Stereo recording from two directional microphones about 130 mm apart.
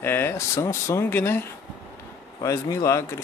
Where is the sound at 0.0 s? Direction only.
15° left (ahead or behind).